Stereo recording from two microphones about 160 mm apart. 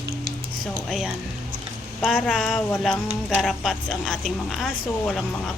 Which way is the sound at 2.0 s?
Centre (ahead or behind).